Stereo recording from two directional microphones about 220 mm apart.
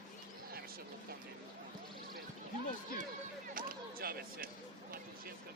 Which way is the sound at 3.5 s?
40° right (ahead or behind).